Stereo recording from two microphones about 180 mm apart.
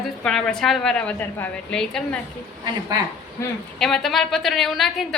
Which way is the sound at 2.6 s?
20° right (ahead or behind).